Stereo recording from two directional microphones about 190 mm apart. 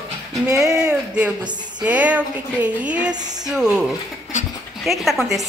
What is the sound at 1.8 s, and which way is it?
A woman's voice, 5° right (ahead or behind).